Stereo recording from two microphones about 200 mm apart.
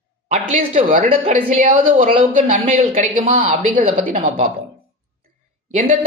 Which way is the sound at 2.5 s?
35° right (ahead or behind).